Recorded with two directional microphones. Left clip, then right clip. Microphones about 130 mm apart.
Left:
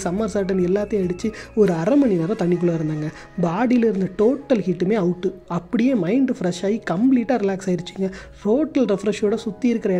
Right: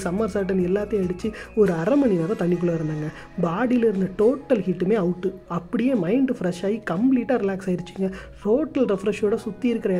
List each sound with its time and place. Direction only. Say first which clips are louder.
0.0 s speech: left 2 dB; 20° left (ahead or behind)